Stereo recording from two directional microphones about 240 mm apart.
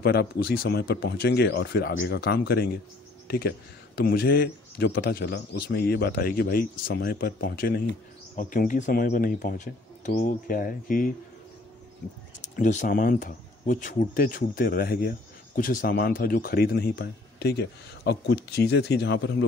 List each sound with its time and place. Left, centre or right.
0.0 s speech: left
12.4 s speech: left